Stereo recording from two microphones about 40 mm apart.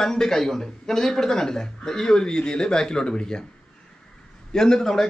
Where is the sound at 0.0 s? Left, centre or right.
Centre.